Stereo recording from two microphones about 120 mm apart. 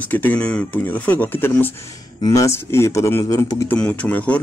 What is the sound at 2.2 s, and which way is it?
Speech, 25° left (ahead or behind).